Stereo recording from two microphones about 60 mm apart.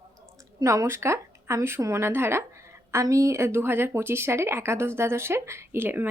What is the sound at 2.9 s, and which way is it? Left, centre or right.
Speech, right.